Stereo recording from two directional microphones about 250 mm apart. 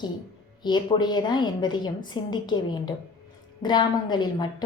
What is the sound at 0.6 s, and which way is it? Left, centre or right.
A woman's voice, centre.